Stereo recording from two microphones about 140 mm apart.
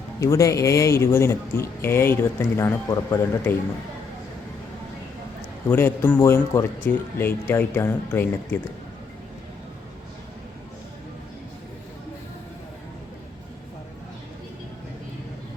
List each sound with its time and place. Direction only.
0.2 s speech: 20° left (ahead or behind)
5.6 s speech: 15° left (ahead or behind)